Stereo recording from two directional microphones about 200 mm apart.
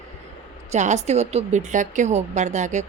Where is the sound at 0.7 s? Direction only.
35° right (ahead or behind).